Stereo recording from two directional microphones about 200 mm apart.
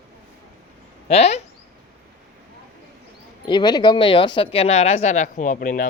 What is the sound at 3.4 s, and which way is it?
Speech, 20° left (ahead or behind).